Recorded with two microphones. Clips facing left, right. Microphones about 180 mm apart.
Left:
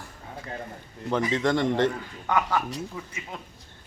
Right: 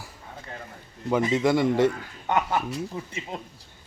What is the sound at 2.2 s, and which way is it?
Speech, 20° right (ahead or behind).